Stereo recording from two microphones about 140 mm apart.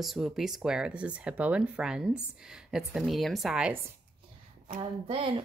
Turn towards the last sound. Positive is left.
turn(degrees=-45)  # may be behind; listen again after turning